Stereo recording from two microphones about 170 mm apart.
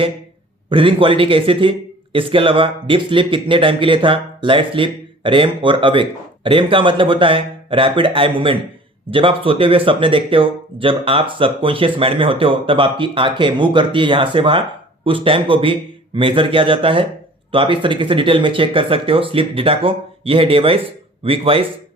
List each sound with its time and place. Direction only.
0.7 s a man's voice: 30° right (ahead or behind)